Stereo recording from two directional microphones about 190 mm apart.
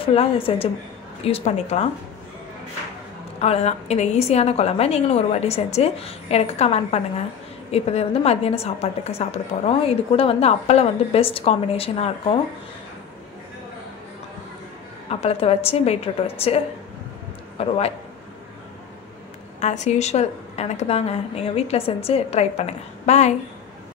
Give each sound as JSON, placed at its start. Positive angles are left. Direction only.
{"t": 0.0, "sound": "a woman's voice", "side_deg": 30}
{"t": 3.3, "sound": "a woman's voice", "side_deg": 35}
{"t": 15.0, "sound": "a woman's voice", "side_deg": 35}
{"t": 19.6, "sound": "a woman's voice", "side_deg": 40}